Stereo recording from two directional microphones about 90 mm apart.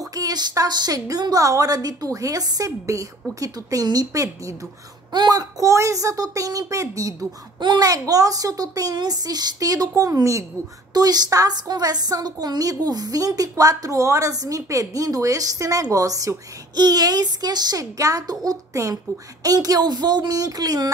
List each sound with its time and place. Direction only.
0.1 s a woman's voice: 45° right (ahead or behind)
5.1 s a woman's voice: 50° right (ahead or behind)